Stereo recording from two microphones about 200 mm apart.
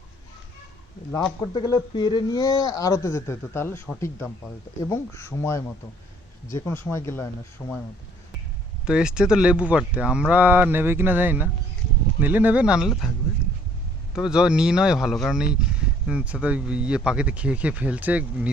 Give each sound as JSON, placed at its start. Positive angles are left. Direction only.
{"t": 1.4, "sound": "speech", "side_deg": 20}
{"t": 8.9, "sound": "speech", "side_deg": -5}
{"t": 14.2, "sound": "speech", "side_deg": -5}